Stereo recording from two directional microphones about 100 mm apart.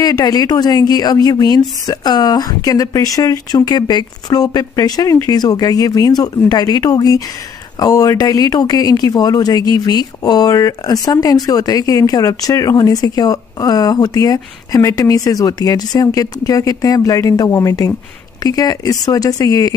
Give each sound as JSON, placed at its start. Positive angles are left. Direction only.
{"t": 0.0, "sound": "speech", "side_deg": 40}